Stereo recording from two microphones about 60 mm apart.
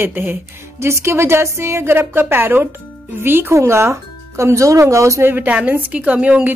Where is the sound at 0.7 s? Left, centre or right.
Right.